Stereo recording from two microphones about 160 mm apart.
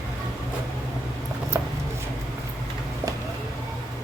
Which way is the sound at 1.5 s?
20° right (ahead or behind).